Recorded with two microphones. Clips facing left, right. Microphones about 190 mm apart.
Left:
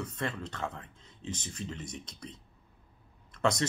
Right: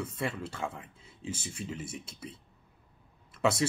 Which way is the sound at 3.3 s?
5° right (ahead or behind).